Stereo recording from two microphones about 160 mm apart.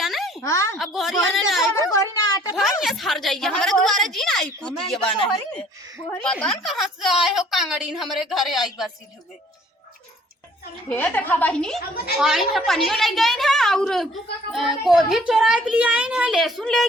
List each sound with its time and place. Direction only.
0.0 s a sound: centre (ahead or behind)
0.4 s a child's voice: 20° left (ahead or behind)
0.8 s a woman's voice: centre (ahead or behind)
1.7 s a sound: 20° left (ahead or behind)
2.6 s a woman's voice: centre (ahead or behind)
6.2 s a woman's voice: 5° left (ahead or behind)
10.8 s a woman's voice: 10° left (ahead or behind)